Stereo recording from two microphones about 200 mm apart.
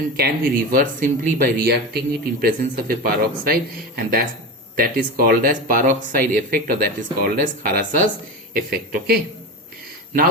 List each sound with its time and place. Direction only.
0.2 s speech: 50° right (ahead or behind)